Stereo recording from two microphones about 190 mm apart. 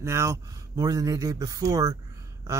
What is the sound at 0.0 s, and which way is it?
Speech, 15° right (ahead or behind).